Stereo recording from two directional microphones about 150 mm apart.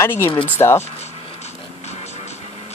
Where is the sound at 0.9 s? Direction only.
45° left (ahead or behind).